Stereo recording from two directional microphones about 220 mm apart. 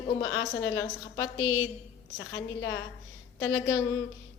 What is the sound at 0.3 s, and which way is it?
A woman's voice, 55° left (ahead or behind).